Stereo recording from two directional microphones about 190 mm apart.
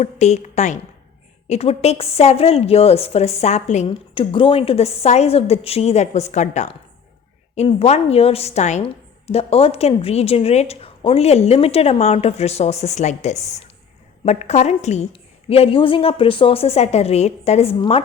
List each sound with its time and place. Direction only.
0.0 s a woman's voice: 35° left (ahead or behind)